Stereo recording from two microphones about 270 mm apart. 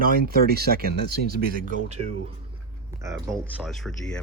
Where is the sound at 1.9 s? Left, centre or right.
Right.